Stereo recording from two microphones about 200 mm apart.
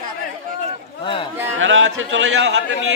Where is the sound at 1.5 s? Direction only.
75° right (ahead or behind).